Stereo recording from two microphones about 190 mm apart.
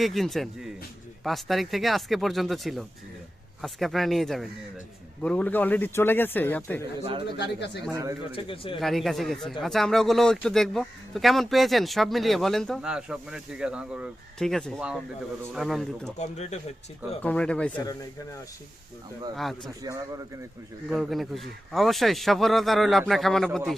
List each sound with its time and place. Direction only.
0.0 s a man's voice: centre (ahead or behind)
7.3 s speech: 65° left (ahead or behind)
7.9 s speech: 15° right (ahead or behind)
8.4 s speech: 30° left (ahead or behind)
8.8 s a man's voice: centre (ahead or behind)
16.1 s speech: 35° left (ahead or behind)
17.2 s a man's voice: 5° left (ahead or behind)
19.4 s a man's voice: centre (ahead or behind)
19.8 s speech: 15° right (ahead or behind)
20.9 s a man's voice: centre (ahead or behind)